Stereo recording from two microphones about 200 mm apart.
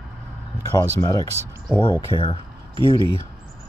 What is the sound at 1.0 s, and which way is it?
Speech, 15° left (ahead or behind).